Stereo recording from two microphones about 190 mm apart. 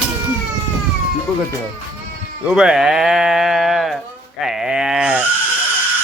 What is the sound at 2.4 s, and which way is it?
Speech, 5° right (ahead or behind).